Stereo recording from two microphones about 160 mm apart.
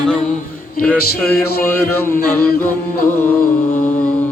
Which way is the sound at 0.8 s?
10° left (ahead or behind).